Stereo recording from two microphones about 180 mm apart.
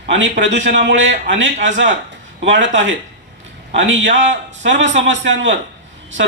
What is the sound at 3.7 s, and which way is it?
Speech, 90° right.